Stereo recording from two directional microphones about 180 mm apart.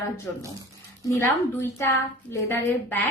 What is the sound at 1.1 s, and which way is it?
A woman's voice, 15° left (ahead or behind).